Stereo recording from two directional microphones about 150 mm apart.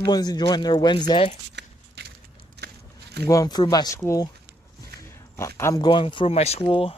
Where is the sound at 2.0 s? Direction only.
90° right.